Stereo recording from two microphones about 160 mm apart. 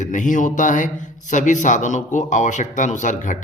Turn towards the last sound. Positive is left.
turn(degrees=50)  # may be behind; listen again after turning